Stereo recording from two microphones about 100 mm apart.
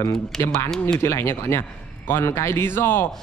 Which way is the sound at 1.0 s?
25° left (ahead or behind).